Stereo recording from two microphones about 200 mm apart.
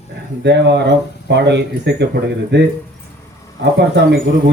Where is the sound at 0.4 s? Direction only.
60° right (ahead or behind).